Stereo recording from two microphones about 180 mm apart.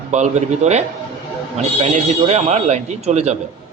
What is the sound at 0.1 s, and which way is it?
Speech, 40° right (ahead or behind).